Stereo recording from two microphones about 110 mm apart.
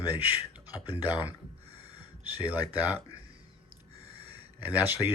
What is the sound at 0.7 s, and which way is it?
Speech, 35° left (ahead or behind).